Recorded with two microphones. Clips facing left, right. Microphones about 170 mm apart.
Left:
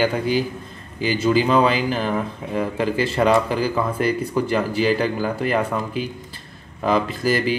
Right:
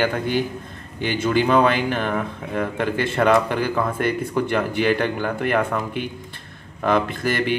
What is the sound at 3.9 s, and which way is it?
Speech, 50° right (ahead or behind).